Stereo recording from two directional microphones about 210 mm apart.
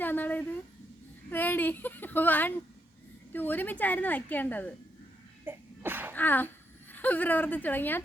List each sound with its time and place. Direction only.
0.0 s a woman's voice: 10° left (ahead or behind)
5.5 s sneeze: 10° right (ahead or behind)
6.1 s a woman's voice: 10° left (ahead or behind)